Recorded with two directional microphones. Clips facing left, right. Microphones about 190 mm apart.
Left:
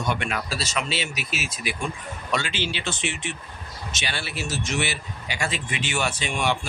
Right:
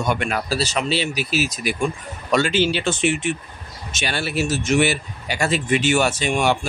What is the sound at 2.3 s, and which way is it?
A man's voice, 45° right (ahead or behind).